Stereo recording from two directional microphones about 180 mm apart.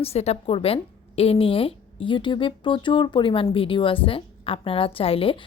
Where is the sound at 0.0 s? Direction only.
35° left (ahead or behind).